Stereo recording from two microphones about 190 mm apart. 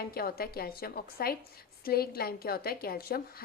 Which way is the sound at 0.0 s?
55° left (ahead or behind).